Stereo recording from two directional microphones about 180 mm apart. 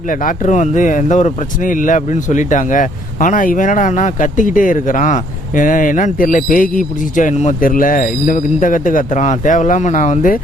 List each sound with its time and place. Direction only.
0.1 s speech: 50° left (ahead or behind)